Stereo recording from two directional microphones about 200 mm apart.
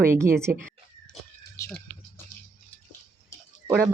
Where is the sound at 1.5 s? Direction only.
15° left (ahead or behind).